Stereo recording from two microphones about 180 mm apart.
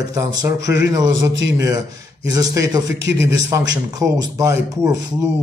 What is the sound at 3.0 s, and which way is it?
Speech, 80° right.